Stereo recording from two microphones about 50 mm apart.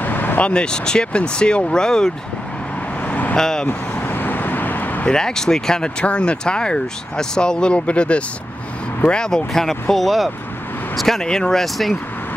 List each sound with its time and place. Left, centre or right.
0.0 s vehicle: left
0.4 s speech: centre
3.1 s vehicle: left
3.3 s speech: centre
3.6 s vehicle: left
5.1 s speech: centre